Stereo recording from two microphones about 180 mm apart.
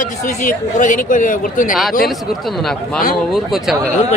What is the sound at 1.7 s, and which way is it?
Speech, centre (ahead or behind).